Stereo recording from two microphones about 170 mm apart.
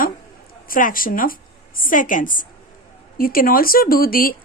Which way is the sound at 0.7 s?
55° left (ahead or behind).